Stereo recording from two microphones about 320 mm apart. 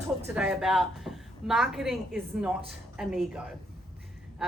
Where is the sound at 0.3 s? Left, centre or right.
Centre.